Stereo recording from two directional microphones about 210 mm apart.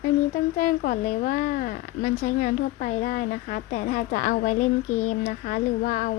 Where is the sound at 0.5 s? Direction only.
40° left (ahead or behind).